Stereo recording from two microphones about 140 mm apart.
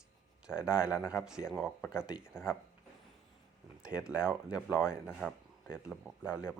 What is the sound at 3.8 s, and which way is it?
Speech, 5° right (ahead or behind).